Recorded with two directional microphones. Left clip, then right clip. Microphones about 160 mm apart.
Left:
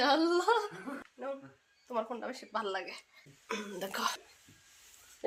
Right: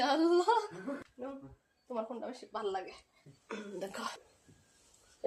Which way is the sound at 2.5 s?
15° left (ahead or behind).